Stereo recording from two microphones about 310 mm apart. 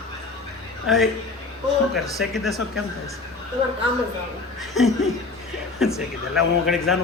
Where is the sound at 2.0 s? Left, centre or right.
Centre.